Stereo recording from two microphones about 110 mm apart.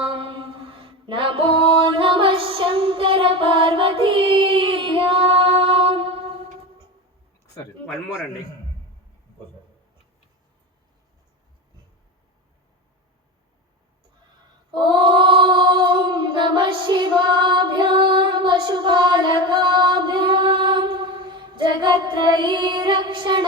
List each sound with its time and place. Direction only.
0.0 s mantra: 50° right (ahead or behind)
14.7 s female singing: 45° right (ahead or behind)